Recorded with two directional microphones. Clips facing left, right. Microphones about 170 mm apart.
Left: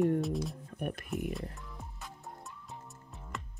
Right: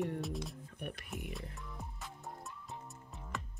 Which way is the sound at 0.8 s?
45° left (ahead or behind).